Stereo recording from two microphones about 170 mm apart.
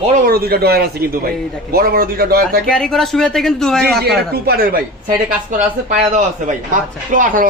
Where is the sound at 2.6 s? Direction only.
5° left (ahead or behind).